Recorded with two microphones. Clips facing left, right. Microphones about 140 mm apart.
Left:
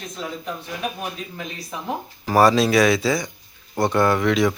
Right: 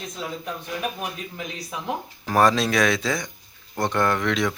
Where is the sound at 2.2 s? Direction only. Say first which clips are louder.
Left 4 dB; 5° left (ahead or behind).